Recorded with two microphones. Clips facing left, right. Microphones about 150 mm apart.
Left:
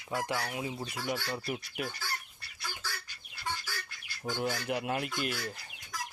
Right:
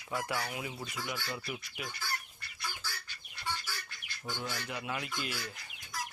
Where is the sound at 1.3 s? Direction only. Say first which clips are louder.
Left 4 dB; 40° left (ahead or behind).